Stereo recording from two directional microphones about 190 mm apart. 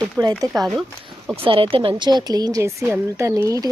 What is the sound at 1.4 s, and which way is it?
Speech, 30° right (ahead or behind).